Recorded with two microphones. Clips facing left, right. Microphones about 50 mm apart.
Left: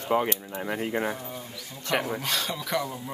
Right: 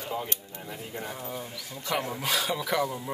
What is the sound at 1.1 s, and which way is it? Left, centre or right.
Speech, centre.